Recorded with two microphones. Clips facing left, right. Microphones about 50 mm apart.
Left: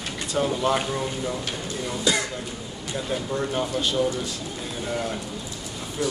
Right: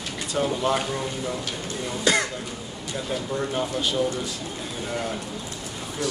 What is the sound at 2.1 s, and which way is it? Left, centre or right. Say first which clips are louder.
Speech: right 2 dB; right.